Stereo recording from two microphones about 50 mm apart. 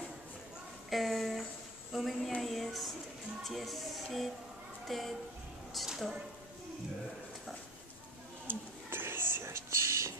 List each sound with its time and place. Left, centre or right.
0.8 s speech: centre
8.5 s whispering: right